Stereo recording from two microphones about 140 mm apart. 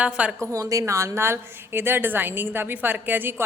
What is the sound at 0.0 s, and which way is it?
Speech, 10° right (ahead or behind).